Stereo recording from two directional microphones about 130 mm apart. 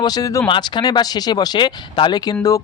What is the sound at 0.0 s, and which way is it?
Speech, 30° left (ahead or behind).